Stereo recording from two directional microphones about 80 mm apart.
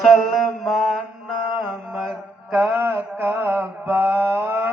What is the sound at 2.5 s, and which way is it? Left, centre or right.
Mantra, right.